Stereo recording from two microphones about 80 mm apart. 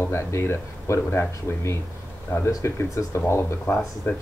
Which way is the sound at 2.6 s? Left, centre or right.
Left.